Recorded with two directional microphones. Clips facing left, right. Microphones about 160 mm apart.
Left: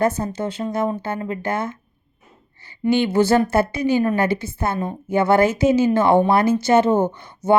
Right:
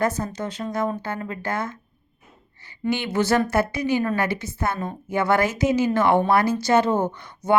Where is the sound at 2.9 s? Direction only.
30° left (ahead or behind).